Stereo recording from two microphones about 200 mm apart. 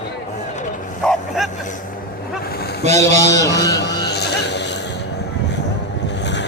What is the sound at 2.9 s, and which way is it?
Speech, 15° left (ahead or behind).